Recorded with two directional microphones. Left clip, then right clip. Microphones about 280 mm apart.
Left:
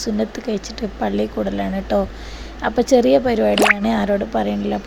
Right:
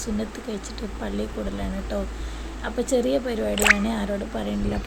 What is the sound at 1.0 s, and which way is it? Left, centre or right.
Speech, left.